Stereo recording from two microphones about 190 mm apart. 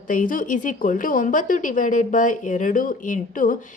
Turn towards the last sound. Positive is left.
turn(degrees=45)  # may be behind; listen again after turning